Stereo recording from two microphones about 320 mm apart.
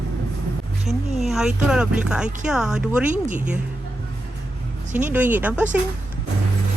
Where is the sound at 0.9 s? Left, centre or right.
Centre.